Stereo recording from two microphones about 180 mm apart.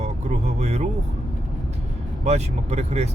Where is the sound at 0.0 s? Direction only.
35° right (ahead or behind).